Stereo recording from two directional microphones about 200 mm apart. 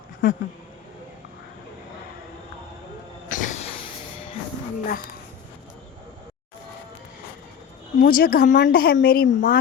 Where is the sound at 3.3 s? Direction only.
40° left (ahead or behind).